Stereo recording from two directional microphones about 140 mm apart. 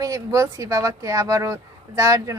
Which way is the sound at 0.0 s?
25° right (ahead or behind).